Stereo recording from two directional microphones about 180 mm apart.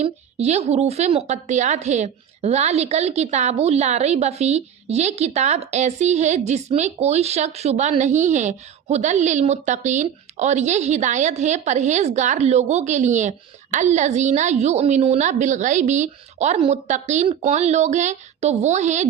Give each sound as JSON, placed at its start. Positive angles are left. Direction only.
{"t": 0.0, "sound": "a woman's voice", "side_deg": -40}